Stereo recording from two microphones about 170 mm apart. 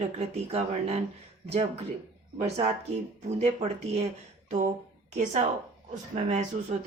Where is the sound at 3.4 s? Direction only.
40° right (ahead or behind).